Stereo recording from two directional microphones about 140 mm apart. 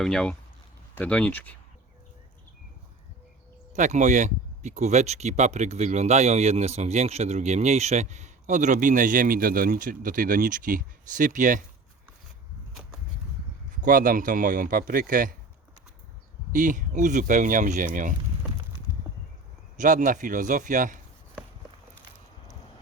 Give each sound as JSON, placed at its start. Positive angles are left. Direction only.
{"t": 0.0, "sound": "speech", "side_deg": 5}
{"t": 3.7, "sound": "speech", "side_deg": -60}
{"t": 13.8, "sound": "speech", "side_deg": -80}
{"t": 16.5, "sound": "speech", "side_deg": -70}
{"t": 19.8, "sound": "speech", "side_deg": -70}